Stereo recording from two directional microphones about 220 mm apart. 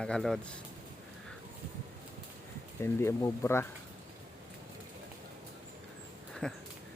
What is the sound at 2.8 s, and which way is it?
Speech, 10° left (ahead or behind).